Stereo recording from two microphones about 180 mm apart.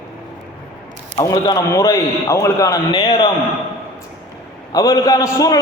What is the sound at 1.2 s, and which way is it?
A man's voice, 20° left (ahead or behind).